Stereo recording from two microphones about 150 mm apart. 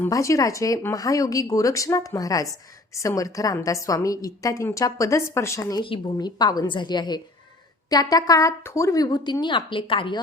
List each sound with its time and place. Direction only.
0.0 s speech: 20° left (ahead or behind)
5.8 s speech: 30° left (ahead or behind)